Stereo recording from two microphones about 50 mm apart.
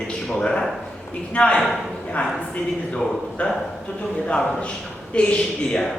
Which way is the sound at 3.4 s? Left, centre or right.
Left.